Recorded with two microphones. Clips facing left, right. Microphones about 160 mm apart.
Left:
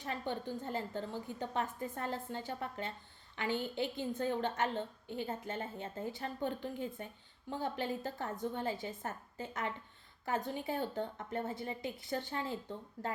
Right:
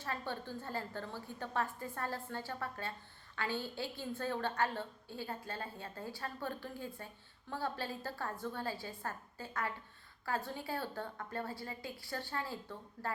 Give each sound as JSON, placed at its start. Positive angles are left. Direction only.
{"t": 0.0, "sound": "a woman's voice", "side_deg": 20}